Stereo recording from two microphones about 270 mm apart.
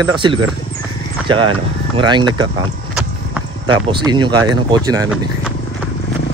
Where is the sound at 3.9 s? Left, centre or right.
Centre.